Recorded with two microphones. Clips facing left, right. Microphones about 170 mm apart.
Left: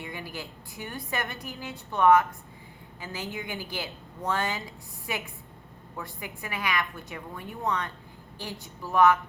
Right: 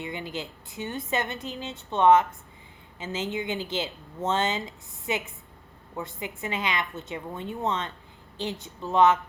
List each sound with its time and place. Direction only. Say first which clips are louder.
0.0 s a woman's voice: right 4 dB; 20° right (ahead or behind)